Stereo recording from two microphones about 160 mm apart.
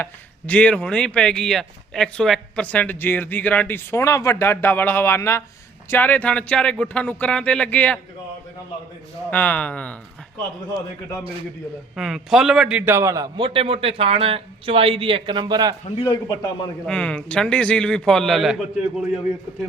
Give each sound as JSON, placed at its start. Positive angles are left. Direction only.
{"t": 0.0, "sound": "speech", "side_deg": 10}
{"t": 9.3, "sound": "speech", "side_deg": 10}
{"t": 11.9, "sound": "a man's voice", "side_deg": -5}
{"t": 12.9, "sound": "a man's voice", "side_deg": -20}
{"t": 16.0, "sound": "a man's voice", "side_deg": 25}
{"t": 16.8, "sound": "a man's voice", "side_deg": 5}